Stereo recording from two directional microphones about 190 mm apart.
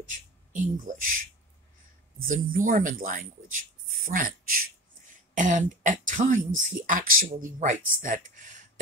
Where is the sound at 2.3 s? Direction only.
45° right (ahead or behind).